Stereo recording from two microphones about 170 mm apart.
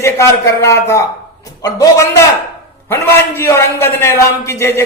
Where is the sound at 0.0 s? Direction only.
15° left (ahead or behind).